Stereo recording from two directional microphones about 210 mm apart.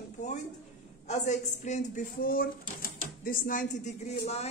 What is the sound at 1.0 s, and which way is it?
Speech, 35° left (ahead or behind).